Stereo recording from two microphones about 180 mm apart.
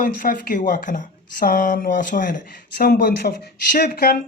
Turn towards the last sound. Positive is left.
turn(degrees=55)  # may be behind; listen again after turning